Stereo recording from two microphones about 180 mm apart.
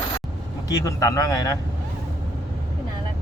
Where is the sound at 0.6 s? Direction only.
20° left (ahead or behind).